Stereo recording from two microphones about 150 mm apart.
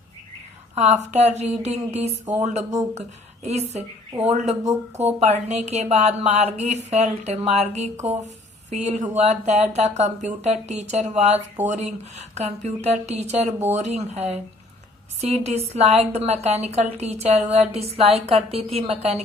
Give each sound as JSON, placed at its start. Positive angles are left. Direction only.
{"t": 0.8, "sound": "a woman's voice", "side_deg": -50}
{"t": 4.3, "sound": "a woman's voice", "side_deg": -45}